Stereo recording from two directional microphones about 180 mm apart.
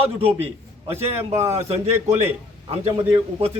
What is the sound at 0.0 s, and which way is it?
A man's voice, 30° right (ahead or behind).